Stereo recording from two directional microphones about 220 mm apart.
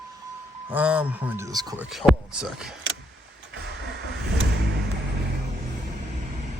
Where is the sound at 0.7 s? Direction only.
5° right (ahead or behind).